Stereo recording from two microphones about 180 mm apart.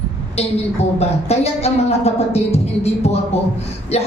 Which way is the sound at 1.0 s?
35° left (ahead or behind).